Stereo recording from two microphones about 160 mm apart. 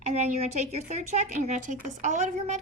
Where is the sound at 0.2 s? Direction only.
45° right (ahead or behind).